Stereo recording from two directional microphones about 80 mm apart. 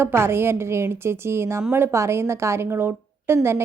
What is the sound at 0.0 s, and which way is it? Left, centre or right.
A woman's voice, right.